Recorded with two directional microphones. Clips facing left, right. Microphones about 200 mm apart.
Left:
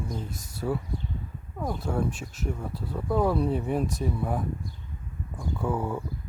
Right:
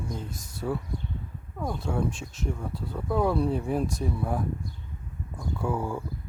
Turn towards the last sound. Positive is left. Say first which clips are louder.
# left 1 dB
turn(degrees=5)  # may be behind; listen again after turning